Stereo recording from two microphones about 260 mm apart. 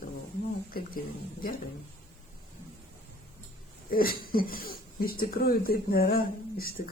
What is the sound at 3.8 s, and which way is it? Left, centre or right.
Speech, left.